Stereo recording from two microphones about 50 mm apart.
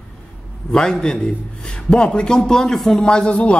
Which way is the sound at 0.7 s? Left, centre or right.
Centre.